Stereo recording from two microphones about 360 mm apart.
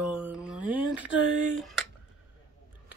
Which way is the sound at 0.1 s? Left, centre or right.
Centre.